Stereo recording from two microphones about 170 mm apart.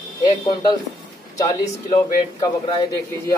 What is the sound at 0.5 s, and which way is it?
A man's voice, 25° left (ahead or behind).